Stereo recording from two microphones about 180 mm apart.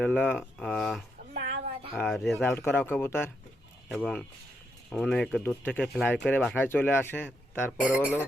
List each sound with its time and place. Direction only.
0.0 s speech: 10° left (ahead or behind)
1.4 s a sound: 40° right (ahead or behind)
2.0 s speech: centre (ahead or behind)
2.4 s speech: 10° left (ahead or behind)
3.8 s speech: centre (ahead or behind)
7.9 s speech: 10° right (ahead or behind)